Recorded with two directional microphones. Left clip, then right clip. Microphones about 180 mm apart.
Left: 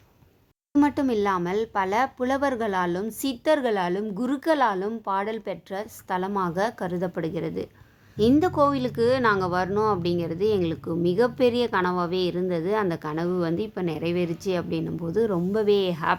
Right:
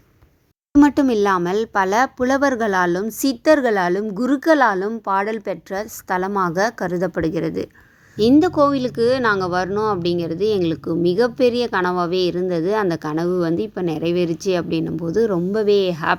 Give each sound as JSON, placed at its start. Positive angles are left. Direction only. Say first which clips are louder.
{"t": 0.8, "sound": "speech", "louder": "right 8 dB", "side_deg": -30}